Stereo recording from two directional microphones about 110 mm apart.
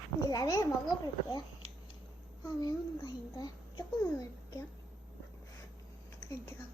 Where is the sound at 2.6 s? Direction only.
35° left (ahead or behind).